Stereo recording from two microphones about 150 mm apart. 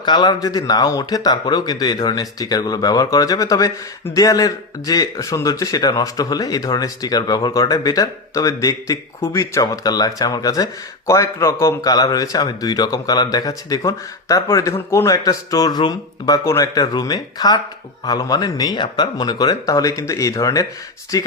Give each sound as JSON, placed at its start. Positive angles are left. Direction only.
{"t": 0.0, "sound": "speech", "side_deg": 30}